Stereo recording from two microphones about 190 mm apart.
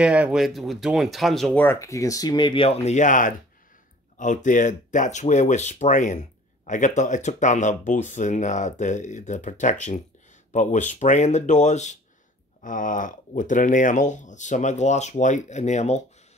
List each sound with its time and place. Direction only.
0.0 s speech: 5° right (ahead or behind); by 16.0 s 35° left (ahead or behind)